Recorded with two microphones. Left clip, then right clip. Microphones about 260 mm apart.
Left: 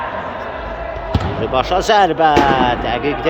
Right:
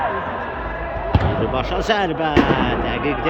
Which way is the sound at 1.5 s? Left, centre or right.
Centre.